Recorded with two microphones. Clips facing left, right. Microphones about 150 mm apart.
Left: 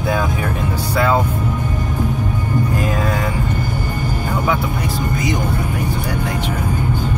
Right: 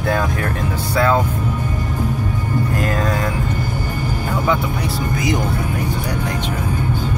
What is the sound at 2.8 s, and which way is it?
Speech, 10° left (ahead or behind).